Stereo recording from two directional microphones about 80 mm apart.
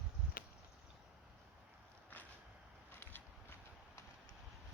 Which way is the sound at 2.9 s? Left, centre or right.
Left.